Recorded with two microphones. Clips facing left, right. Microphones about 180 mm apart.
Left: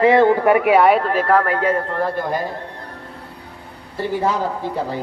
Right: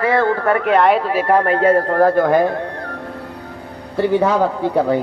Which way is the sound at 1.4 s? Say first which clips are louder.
Right 5 dB; 30° right (ahead or behind).